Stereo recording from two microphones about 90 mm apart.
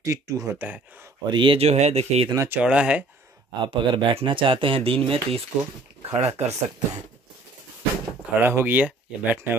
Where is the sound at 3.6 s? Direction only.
80° right.